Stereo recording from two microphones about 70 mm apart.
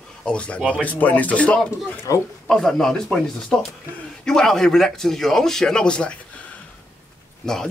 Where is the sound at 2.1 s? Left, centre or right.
Left.